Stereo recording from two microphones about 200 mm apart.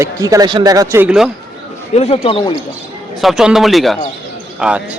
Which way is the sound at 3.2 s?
5° right (ahead or behind).